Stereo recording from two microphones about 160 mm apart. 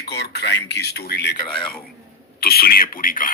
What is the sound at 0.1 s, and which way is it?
Speech, 90° left.